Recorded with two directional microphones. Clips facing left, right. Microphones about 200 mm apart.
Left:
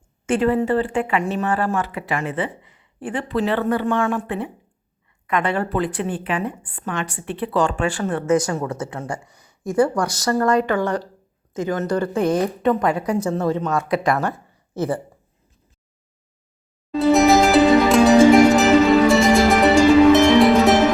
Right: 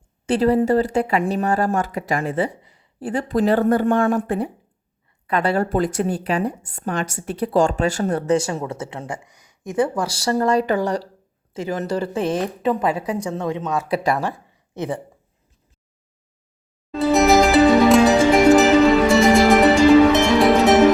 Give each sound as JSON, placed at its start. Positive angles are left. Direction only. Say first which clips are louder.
{"t": 0.3, "sound": "a woman's voice", "louder": "right 2 dB", "side_deg": -40}
{"t": 8.4, "sound": "a woman's voice", "louder": "left 2 dB", "side_deg": -25}
{"t": 11.6, "sound": "speech", "louder": "left 2 dB", "side_deg": -10}
{"t": 11.9, "sound": "speech", "louder": "left 3 dB", "side_deg": -25}
{"t": 13.0, "sound": "a woman's voice", "louder": "left 3 dB", "side_deg": 0}
{"t": 13.9, "sound": "a woman's voice", "louder": "even", "side_deg": -30}
{"t": 16.9, "sound": "music", "louder": "left 1 dB", "side_deg": 0}